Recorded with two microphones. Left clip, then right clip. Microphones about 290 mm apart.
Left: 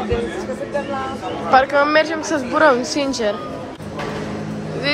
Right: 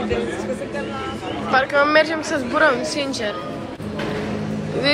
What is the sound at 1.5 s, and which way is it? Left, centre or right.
A woman's voice, centre.